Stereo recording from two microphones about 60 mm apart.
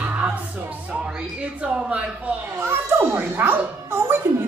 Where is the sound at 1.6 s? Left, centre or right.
Centre.